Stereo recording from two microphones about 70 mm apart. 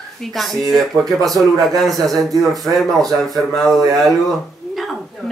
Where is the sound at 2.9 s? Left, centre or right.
Right.